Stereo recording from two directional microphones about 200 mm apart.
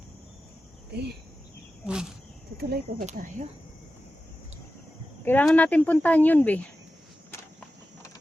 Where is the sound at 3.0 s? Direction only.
40° right (ahead or behind).